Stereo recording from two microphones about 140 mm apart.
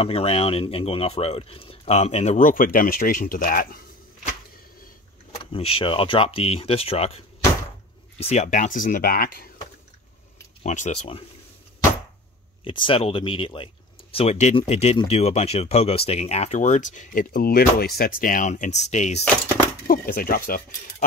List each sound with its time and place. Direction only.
0.0 s speech: 45° left (ahead or behind); by 3.8 s 90° left
5.4 s speech: 40° left (ahead or behind); by 9.5 s 90° left
10.6 s speech: 60° left (ahead or behind)
12.6 s speech: 40° left (ahead or behind)
14.1 s speech: 50° left (ahead or behind)
19.9 s speech: 90° left